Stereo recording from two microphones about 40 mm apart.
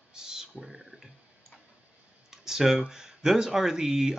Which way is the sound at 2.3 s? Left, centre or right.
Centre.